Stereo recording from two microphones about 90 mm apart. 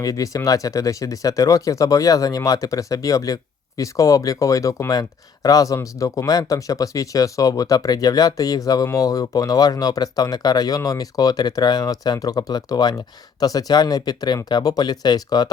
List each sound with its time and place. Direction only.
0.0 s speech: 40° left (ahead or behind)